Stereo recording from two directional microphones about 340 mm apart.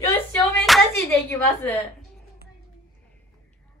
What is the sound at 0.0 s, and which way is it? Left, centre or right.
Hands, centre.